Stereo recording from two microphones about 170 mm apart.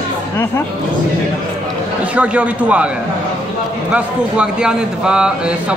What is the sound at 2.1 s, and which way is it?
Speech, 5° right (ahead or behind).